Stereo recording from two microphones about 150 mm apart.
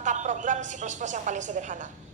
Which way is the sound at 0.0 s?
55° right (ahead or behind).